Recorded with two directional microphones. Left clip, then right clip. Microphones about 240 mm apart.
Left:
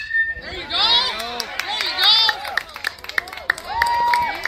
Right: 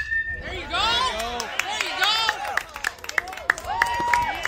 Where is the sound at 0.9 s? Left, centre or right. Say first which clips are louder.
Left 4 dB; right.